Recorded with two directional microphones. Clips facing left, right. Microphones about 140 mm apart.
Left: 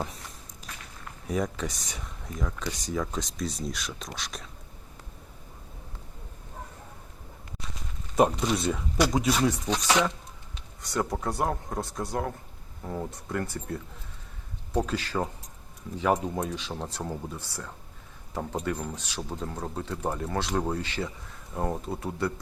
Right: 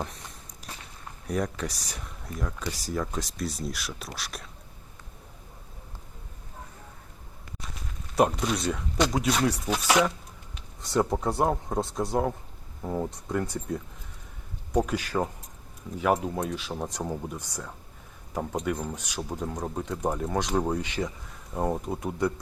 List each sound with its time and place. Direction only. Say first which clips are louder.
0.7 s walk: right 2 dB; 30° right (ahead or behind)
1.3 s speech: even; centre (ahead or behind)
8.1 s speech: left 1 dB; centre (ahead or behind)
10.8 s speech: right 4 dB; 25° right (ahead or behind)